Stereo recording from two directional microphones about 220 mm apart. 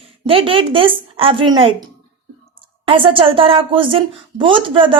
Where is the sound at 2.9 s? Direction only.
25° right (ahead or behind).